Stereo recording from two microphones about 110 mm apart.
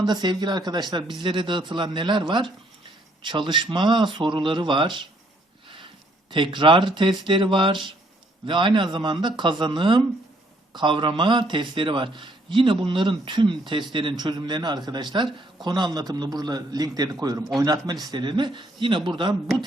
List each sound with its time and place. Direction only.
0.0 s a man's voice: 40° right (ahead or behind)
6.3 s a man's voice: 45° right (ahead or behind)